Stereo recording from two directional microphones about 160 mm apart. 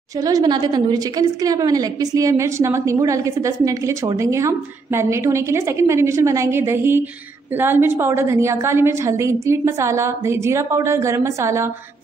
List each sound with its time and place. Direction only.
0.2 s a woman's voice: 25° right (ahead or behind)